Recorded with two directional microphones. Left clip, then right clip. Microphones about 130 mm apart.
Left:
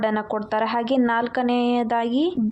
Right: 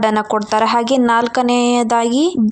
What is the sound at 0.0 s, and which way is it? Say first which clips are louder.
Speech: right 8 dB; 25° right (ahead or behind).